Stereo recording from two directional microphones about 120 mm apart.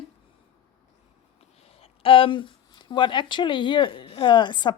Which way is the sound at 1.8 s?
50° left (ahead or behind).